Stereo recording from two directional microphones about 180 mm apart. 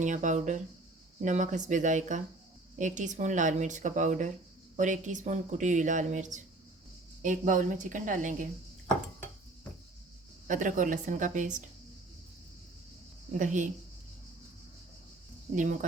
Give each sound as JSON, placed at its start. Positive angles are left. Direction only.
{"t": 0.0, "sound": "speech", "side_deg": -45}
{"t": 10.4, "sound": "speech", "side_deg": -45}
{"t": 13.4, "sound": "speech", "side_deg": -45}